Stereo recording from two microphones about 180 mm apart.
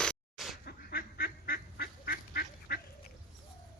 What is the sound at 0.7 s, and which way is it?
Duck, 60° left (ahead or behind).